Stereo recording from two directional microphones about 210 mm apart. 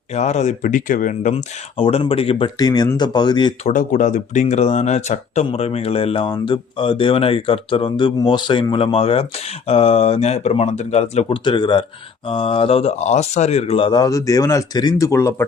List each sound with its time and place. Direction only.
0.1 s speech: 35° left (ahead or behind)
1.8 s speech: 25° left (ahead or behind)
3.7 s speech: 35° left (ahead or behind); by 15.4 s 15° left (ahead or behind)